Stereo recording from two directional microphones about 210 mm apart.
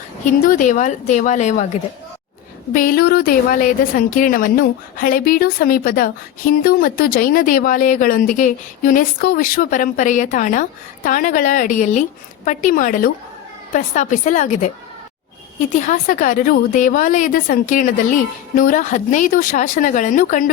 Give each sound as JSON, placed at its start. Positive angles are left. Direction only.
{"t": 0.3, "sound": "speech", "side_deg": 35}
{"t": 2.7, "sound": "speech", "side_deg": 45}
{"t": 15.7, "sound": "speech", "side_deg": 35}